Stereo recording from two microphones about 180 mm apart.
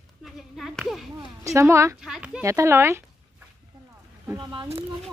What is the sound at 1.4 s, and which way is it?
Speech, 15° right (ahead or behind).